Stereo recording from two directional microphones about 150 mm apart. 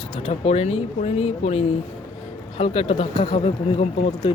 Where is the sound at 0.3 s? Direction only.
45° left (ahead or behind).